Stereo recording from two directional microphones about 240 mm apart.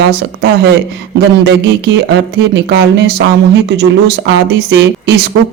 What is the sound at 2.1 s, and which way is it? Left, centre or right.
Speech, right.